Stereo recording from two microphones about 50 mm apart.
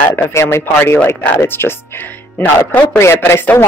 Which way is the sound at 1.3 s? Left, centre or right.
Left.